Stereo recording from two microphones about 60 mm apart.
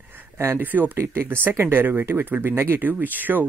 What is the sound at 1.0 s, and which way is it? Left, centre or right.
Speech, right.